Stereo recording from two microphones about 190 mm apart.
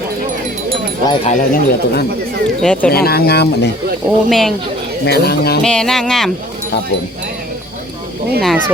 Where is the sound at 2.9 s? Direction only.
55° left (ahead or behind).